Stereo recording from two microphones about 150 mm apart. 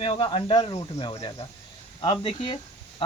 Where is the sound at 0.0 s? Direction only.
35° left (ahead or behind).